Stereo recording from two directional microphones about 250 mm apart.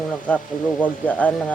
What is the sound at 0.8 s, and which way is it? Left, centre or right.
Speech, centre.